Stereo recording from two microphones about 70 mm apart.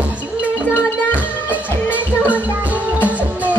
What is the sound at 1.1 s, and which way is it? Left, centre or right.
Music, left.